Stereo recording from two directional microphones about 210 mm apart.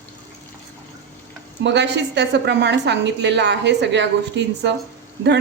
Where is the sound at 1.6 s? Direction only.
55° right (ahead or behind).